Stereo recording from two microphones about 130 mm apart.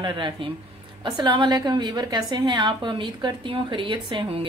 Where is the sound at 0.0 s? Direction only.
35° right (ahead or behind).